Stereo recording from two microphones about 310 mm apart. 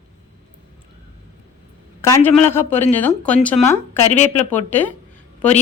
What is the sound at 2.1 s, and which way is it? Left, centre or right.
A man's voice, centre.